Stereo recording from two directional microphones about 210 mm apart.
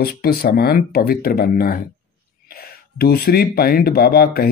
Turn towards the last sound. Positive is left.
turn(degrees=45)  # may be behind; listen again after turning